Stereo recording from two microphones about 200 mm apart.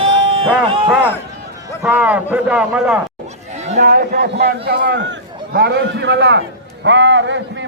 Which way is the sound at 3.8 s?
50° right (ahead or behind).